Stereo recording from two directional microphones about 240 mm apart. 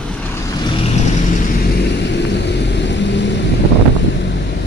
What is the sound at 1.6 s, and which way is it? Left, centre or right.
Vehicle, left.